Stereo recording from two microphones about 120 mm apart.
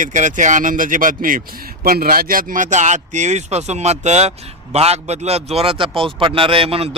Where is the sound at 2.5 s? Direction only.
90° right; by 6.8 s 50° right (ahead or behind).